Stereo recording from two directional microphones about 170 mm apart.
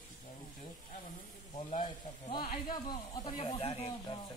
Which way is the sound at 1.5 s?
35° left (ahead or behind).